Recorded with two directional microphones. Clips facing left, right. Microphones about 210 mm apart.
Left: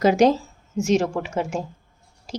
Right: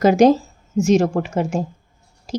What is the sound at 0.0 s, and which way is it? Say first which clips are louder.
A woman's voice: right 4 dB; 45° right (ahead or behind).